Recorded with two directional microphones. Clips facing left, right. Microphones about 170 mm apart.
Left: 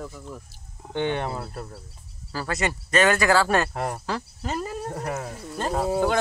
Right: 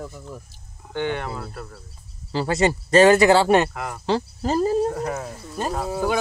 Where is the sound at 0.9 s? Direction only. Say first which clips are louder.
Even; 20° left (ahead or behind).